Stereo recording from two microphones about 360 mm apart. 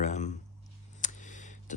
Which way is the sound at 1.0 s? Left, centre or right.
Left.